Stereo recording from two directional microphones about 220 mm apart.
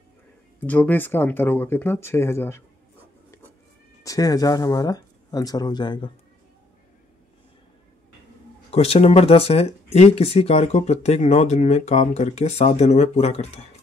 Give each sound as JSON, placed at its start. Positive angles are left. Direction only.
{"t": 0.6, "sound": "speech", "side_deg": 5}
{"t": 4.0, "sound": "speech", "side_deg": 15}
{"t": 8.6, "sound": "speech", "side_deg": 30}